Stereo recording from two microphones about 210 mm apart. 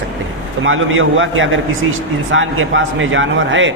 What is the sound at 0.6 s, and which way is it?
A man's voice, 70° right (ahead or behind).